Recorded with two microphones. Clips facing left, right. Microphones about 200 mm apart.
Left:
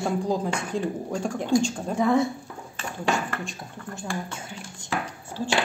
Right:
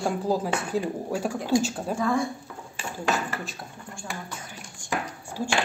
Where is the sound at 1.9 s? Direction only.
20° left (ahead or behind).